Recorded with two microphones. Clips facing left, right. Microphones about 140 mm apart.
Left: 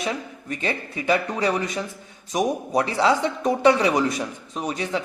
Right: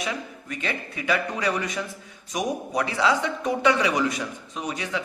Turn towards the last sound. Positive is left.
turn(degrees=35)  # may be behind; listen again after turning